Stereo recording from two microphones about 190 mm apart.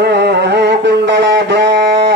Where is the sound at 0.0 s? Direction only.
60° right (ahead or behind).